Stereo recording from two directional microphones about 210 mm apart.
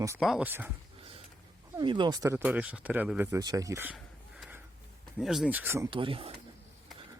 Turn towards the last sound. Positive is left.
turn(degrees=-25)  # may be behind; listen again after turning